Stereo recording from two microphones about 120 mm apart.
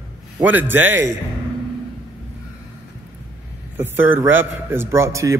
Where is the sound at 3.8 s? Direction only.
20° right (ahead or behind).